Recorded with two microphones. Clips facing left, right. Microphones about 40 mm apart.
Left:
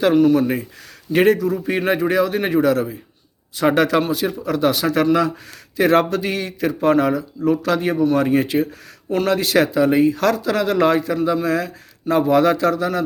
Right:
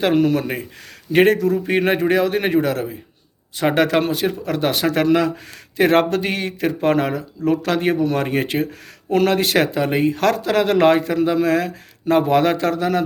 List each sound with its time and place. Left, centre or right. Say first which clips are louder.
0.2 s speech: left 3 dB; right
1.1 s speech: right 1 dB; right
1.5 s a man's voice: right 1 dB; right